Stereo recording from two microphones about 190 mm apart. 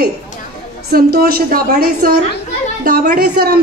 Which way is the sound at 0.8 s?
50° right (ahead or behind).